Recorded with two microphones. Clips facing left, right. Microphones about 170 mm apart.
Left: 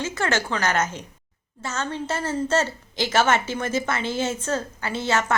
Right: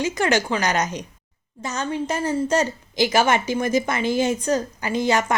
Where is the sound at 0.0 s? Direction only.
15° right (ahead or behind).